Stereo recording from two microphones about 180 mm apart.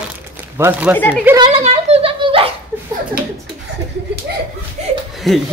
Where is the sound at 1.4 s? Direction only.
35° right (ahead or behind).